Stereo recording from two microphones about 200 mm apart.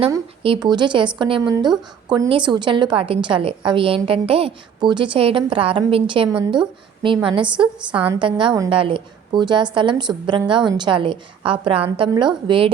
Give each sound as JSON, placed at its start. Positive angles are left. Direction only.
{"t": 0.1, "sound": "a woman's voice", "side_deg": -25}
{"t": 7.9, "sound": "a woman's voice", "side_deg": -10}
{"t": 8.2, "sound": "a woman's voice", "side_deg": -25}